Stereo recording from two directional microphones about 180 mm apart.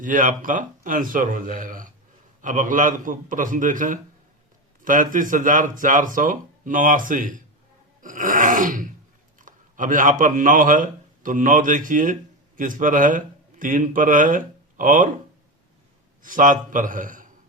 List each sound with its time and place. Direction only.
0.0 s speech: 45° right (ahead or behind)
8.0 s a sound: 45° right (ahead or behind)
9.4 s a man's voice: 45° right (ahead or behind)
16.2 s speech: 50° right (ahead or behind)